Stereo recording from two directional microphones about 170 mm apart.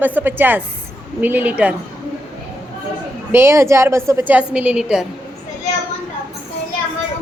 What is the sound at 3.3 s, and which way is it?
A woman's voice, 15° right (ahead or behind).